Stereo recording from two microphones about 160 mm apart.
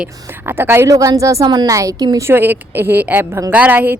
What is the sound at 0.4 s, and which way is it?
A woman's voice, 15° right (ahead or behind).